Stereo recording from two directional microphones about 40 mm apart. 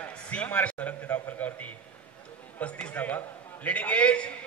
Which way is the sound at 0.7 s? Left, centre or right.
Left.